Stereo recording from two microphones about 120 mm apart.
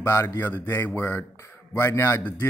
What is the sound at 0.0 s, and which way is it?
A man's voice, 20° left (ahead or behind).